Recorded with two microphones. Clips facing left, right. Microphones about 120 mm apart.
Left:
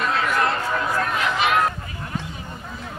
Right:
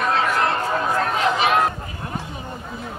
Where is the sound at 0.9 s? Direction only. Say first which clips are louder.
Right 3 dB; 30° right (ahead or behind).